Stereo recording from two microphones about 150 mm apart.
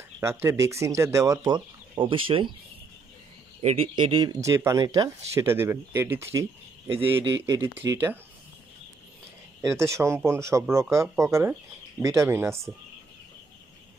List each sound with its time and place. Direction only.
0.2 s speech: 20° right (ahead or behind); by 2.5 s 35° right (ahead or behind)
3.6 s speech: 40° right (ahead or behind); by 6.4 s 15° right (ahead or behind)
7.4 s speech: 20° right (ahead or behind)
9.6 s speech: 20° right (ahead or behind)